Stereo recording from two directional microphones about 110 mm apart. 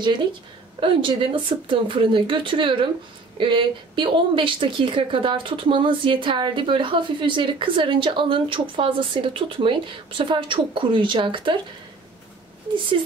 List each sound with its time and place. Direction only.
0.7 s speech: 50° right (ahead or behind)